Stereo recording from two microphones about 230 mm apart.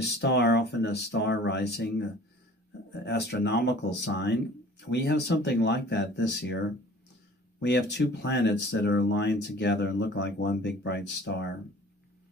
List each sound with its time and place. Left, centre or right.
0.0 s speech: left
3.1 s speech: left